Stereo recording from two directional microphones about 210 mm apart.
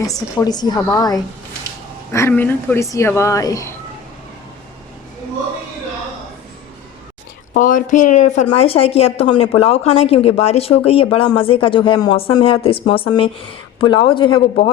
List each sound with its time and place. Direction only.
0.0 s speech: 15° left (ahead or behind)
7.5 s a woman's voice: 40° left (ahead or behind); by 14.4 s 25° left (ahead or behind)